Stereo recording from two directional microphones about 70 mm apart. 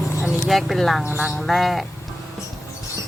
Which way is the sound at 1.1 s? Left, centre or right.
Centre.